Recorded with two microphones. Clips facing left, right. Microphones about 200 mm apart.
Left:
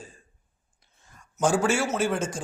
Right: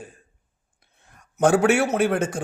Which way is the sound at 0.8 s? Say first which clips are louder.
Right 1 dB; 60° right (ahead or behind).